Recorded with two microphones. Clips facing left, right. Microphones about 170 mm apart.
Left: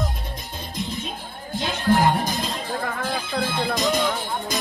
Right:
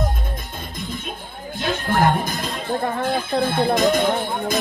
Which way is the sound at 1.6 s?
55° right (ahead or behind).